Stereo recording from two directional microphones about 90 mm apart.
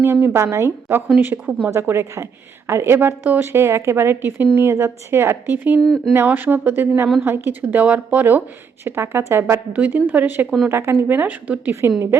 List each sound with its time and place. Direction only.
0.0 s a woman's voice: 25° right (ahead or behind)
5.8 s speech: 5° left (ahead or behind)
6.1 s speech: 20° right (ahead or behind)
11.7 s a woman's voice: 30° right (ahead or behind)